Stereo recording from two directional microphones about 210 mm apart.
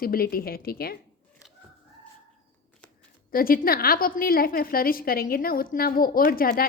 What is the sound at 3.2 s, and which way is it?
A woman's voice, 45° left (ahead or behind).